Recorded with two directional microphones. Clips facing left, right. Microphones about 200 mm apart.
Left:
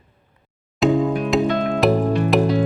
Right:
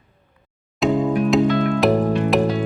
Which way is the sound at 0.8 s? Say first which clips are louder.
Even; centre (ahead or behind).